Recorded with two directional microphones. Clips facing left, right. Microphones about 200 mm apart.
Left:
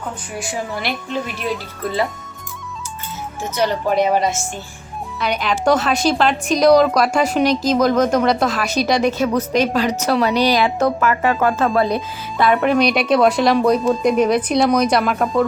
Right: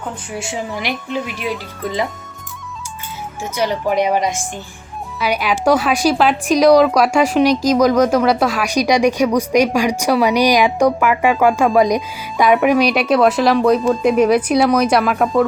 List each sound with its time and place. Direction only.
0.3 s speech: 25° right (ahead or behind)
0.8 s a woman's voice: 15° right (ahead or behind)
3.4 s a woman's voice: 10° right (ahead or behind)